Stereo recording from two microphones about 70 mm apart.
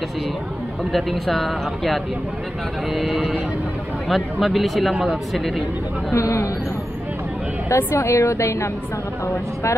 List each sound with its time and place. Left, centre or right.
0.9 s speech: centre
6.1 s a woman's voice: left
7.7 s a woman's voice: left